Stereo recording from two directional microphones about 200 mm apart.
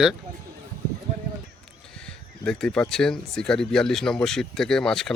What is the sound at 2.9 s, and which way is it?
Speech, 5° left (ahead or behind).